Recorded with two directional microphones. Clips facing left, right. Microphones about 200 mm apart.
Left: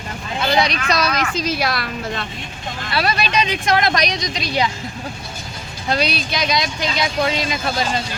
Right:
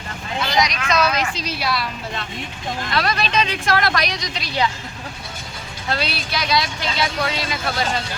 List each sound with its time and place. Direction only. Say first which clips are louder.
0.4 s speech: left 3 dB; 30° left (ahead or behind); by 1.6 s 45° left (ahead or behind)
2.9 s speech: left 2 dB; 10° left (ahead or behind)
5.9 s speech: left 4 dB; 15° left (ahead or behind)